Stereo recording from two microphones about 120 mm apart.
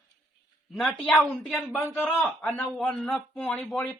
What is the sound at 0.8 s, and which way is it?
Speech, 5° left (ahead or behind).